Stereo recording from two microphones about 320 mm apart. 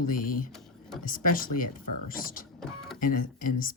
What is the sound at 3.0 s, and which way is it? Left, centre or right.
Speech, left.